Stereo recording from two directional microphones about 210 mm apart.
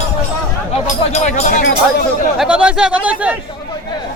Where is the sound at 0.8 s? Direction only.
35° left (ahead or behind).